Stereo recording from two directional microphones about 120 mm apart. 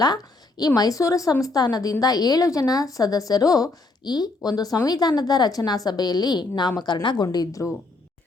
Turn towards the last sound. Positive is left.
turn(degrees=30)  # may be behind; listen again after turning